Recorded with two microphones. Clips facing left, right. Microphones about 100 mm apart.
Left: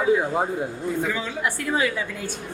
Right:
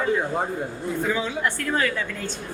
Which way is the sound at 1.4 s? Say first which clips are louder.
Even; 10° left (ahead or behind).